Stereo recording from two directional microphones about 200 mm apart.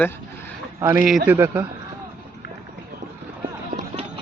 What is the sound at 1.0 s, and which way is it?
Speech, 5° right (ahead or behind).